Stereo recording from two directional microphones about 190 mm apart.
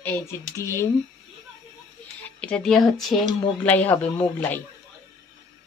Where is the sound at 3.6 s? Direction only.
10° left (ahead or behind).